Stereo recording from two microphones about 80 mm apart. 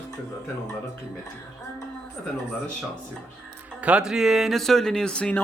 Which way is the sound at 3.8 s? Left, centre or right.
Centre.